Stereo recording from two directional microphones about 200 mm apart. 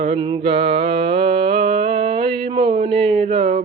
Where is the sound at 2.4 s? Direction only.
25° right (ahead or behind).